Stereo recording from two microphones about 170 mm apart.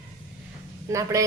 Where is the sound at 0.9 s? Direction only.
20° right (ahead or behind).